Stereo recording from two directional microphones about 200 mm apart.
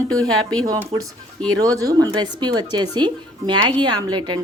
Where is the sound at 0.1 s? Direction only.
20° right (ahead or behind).